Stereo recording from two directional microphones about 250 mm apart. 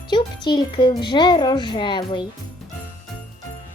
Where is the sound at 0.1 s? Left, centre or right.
Centre.